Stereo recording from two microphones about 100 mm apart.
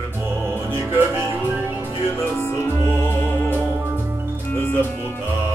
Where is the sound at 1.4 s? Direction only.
20° right (ahead or behind).